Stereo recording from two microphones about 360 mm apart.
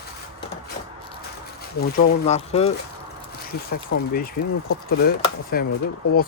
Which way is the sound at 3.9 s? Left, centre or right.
Left.